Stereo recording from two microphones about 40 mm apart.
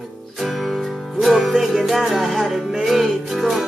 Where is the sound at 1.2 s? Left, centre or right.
Centre.